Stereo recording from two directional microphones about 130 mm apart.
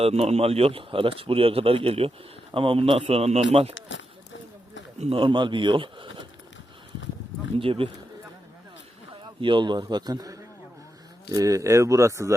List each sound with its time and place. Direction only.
0.0 s speech: 55° right (ahead or behind)
4.9 s speech: 45° right (ahead or behind)
7.5 s speech: 45° right (ahead or behind)
9.4 s speech: 40° right (ahead or behind); by 12.3 s 20° right (ahead or behind)